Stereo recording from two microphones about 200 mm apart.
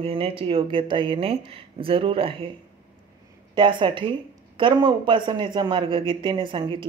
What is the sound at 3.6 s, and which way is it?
Speech, 25° right (ahead or behind).